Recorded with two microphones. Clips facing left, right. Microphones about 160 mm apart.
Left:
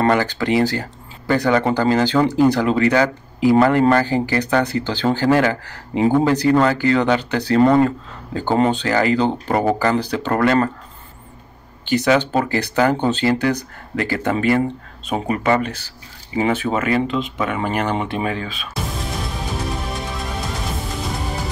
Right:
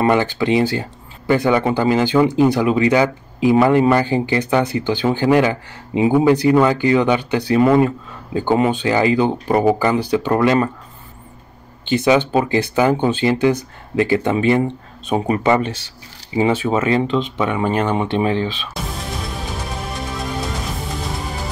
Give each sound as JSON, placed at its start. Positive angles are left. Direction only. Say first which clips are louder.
{"t": 0.1, "sound": "speech", "louder": "right 2 dB", "side_deg": -20}
{"t": 11.8, "sound": "speech", "louder": "right 1 dB", "side_deg": -20}
{"t": 18.8, "sound": "music", "louder": "left 6 dB", "side_deg": 0}